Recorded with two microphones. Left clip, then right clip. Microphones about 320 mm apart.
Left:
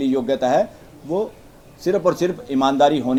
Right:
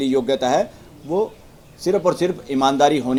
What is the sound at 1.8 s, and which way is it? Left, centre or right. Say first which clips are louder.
A man's voice: even; centre.